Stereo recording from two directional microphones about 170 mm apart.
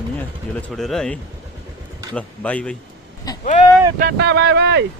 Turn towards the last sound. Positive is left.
turn(degrees=-90)